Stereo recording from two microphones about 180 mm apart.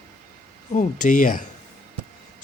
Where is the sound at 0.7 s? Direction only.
45° left (ahead or behind).